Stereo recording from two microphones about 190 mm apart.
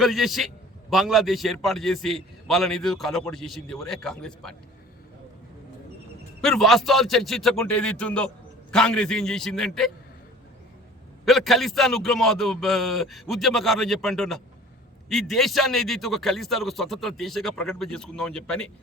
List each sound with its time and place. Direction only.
0.0 s a man's voice: centre (ahead or behind)
6.4 s a man's voice: centre (ahead or behind)
11.3 s a man's voice: centre (ahead or behind)